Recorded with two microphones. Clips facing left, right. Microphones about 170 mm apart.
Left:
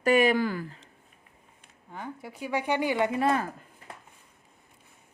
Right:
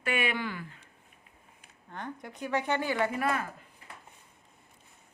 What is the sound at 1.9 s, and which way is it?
Speech, 5° left (ahead or behind).